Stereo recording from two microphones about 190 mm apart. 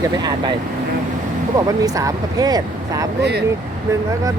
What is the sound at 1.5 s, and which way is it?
Speech, 20° right (ahead or behind).